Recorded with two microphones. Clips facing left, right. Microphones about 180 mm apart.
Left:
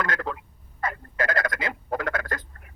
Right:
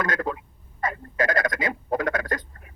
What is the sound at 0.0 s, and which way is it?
Speech, 20° right (ahead or behind).